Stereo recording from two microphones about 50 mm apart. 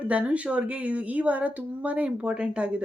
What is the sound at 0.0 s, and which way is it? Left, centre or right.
Speech, right.